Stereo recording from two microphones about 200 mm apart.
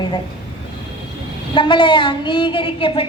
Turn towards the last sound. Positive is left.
turn(degrees=25)  # may be behind; listen again after turning